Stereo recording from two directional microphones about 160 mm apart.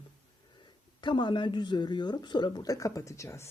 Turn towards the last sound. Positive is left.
turn(degrees=20)  # may be behind; listen again after turning